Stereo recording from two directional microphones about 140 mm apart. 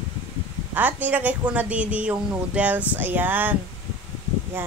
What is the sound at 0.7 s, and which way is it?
Speech, 10° right (ahead or behind).